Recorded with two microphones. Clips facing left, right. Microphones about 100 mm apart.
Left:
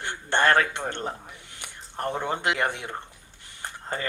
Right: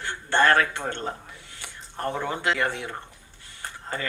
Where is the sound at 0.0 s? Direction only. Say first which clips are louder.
Right 1 dB; 20° left (ahead or behind).